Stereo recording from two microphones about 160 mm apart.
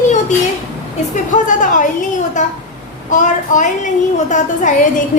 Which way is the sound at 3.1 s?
50° left (ahead or behind).